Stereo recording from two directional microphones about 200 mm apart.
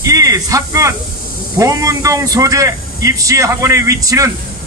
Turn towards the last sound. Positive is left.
turn(degrees=-15)  # may be behind; listen again after turning